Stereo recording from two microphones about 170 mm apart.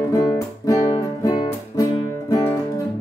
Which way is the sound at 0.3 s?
20° left (ahead or behind).